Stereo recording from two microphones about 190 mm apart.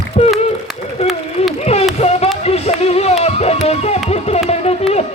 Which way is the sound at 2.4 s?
35° left (ahead or behind).